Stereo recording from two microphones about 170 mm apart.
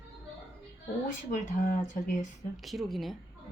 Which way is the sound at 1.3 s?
50° left (ahead or behind).